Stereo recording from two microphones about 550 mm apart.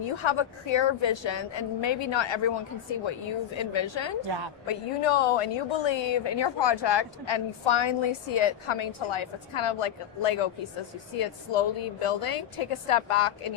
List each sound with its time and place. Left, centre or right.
0.2 s a woman's voice: left
3.6 s a woman's voice: left
4.6 s a woman's voice: left